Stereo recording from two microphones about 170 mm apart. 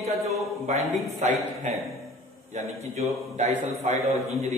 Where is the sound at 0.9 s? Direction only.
40° right (ahead or behind).